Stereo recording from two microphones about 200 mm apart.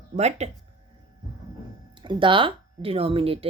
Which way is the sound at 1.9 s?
25° right (ahead or behind).